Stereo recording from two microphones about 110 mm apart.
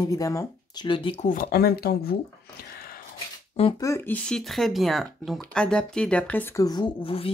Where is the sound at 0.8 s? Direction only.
50° left (ahead or behind).